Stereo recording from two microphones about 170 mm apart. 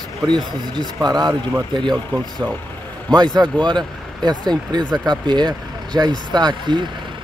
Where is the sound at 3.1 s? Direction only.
25° right (ahead or behind).